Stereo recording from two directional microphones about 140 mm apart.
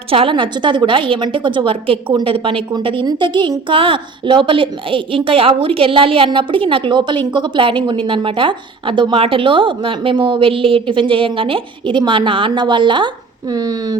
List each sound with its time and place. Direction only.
0.1 s a woman's voice: 40° right (ahead or behind)